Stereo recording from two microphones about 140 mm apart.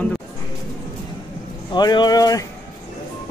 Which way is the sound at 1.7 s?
30° left (ahead or behind).